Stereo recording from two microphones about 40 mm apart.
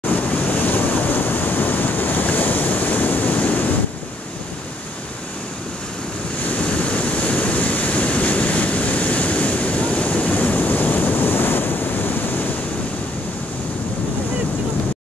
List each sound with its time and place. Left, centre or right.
0.1 s waves: left
6.4 s waves: left